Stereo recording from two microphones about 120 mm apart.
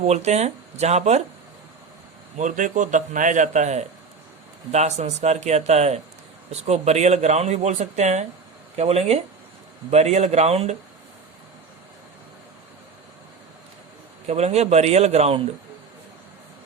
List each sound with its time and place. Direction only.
0.0 s speech: 65° right (ahead or behind)
2.4 s a man's voice: 90° right; by 8.3 s 75° right (ahead or behind)
8.7 s a man's voice: 60° right (ahead or behind)
14.3 s a man's voice: 65° right (ahead or behind)